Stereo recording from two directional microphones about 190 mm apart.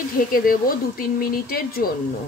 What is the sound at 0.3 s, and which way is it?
Speech, 50° left (ahead or behind).